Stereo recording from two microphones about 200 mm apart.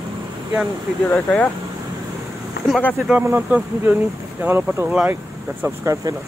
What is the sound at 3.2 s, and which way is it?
Speech, 10° right (ahead or behind).